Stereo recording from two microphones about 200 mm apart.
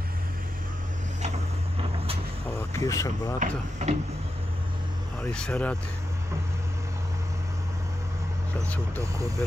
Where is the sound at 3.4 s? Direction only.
35° right (ahead or behind).